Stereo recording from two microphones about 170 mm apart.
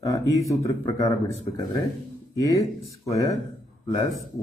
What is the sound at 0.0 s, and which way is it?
Speech, 20° left (ahead or behind).